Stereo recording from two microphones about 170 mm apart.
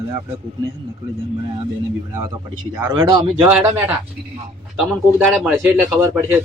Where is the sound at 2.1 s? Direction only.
20° right (ahead or behind).